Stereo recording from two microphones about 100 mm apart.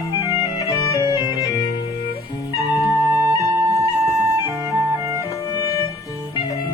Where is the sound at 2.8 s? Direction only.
30° right (ahead or behind).